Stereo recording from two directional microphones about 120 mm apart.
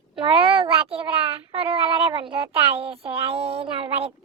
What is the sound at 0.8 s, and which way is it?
A child's voice, 55° right (ahead or behind).